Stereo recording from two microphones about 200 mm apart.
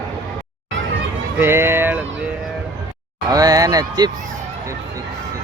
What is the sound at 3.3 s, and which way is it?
Speech, 20° right (ahead or behind).